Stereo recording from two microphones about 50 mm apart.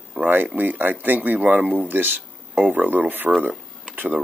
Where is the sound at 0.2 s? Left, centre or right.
Right.